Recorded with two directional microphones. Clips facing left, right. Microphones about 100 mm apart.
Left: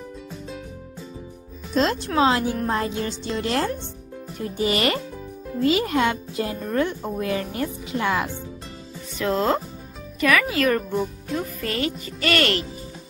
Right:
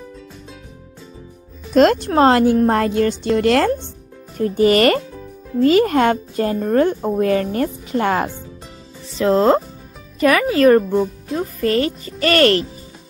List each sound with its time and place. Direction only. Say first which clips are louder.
1.7 s speech: right 9 dB; 60° right (ahead or behind)
4.4 s speech: right 10 dB; 50° right (ahead or behind)
9.2 s speech: right 8 dB; 30° right (ahead or behind)